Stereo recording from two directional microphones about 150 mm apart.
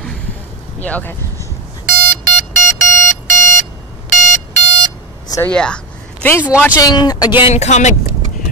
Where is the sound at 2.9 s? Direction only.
15° left (ahead or behind).